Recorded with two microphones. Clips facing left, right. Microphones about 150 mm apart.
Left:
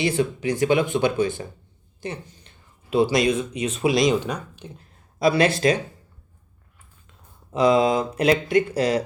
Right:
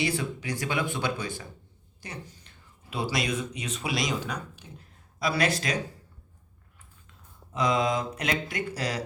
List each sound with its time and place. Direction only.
0.0 s a woman's voice: 20° left (ahead or behind)
7.5 s speech: 30° left (ahead or behind)